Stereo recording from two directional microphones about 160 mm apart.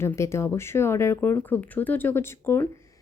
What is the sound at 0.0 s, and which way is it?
A woman's voice, 15° left (ahead or behind).